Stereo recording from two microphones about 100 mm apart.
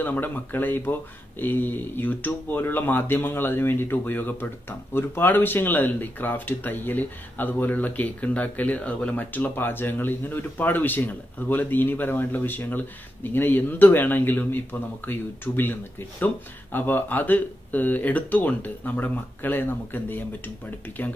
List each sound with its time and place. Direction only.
0.0 s speech: 20° left (ahead or behind)